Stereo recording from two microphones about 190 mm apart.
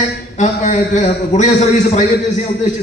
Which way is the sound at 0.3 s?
40° left (ahead or behind).